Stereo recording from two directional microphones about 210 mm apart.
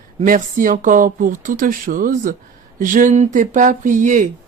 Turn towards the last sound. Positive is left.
turn(degrees=-40)  # may be behind; listen again after turning